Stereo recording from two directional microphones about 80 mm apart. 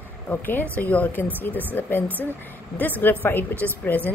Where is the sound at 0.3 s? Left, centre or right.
Left.